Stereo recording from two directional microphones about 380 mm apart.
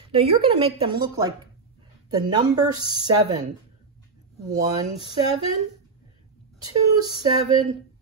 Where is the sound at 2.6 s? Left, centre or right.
Centre.